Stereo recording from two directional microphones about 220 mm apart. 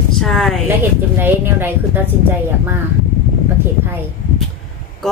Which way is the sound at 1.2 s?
10° right (ahead or behind).